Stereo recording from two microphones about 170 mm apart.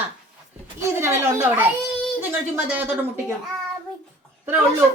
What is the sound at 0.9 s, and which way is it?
Speech, 15° right (ahead or behind).